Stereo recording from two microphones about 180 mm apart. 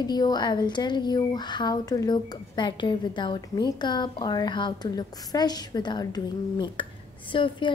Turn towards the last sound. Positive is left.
turn(degrees=25)  # may be behind; listen again after turning